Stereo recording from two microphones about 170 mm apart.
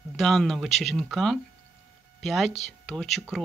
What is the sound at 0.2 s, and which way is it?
Speech, centre (ahead or behind).